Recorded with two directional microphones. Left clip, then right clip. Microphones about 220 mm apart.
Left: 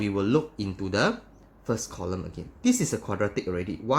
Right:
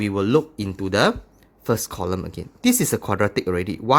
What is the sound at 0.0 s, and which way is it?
Speech, 45° right (ahead or behind).